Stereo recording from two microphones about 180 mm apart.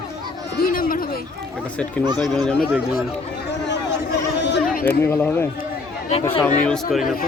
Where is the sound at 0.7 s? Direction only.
50° left (ahead or behind).